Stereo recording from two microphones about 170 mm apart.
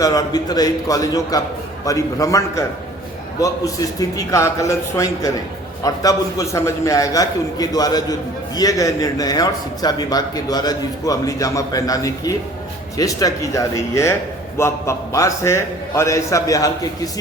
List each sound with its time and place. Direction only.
0.0 s a man's voice: 20° left (ahead or behind)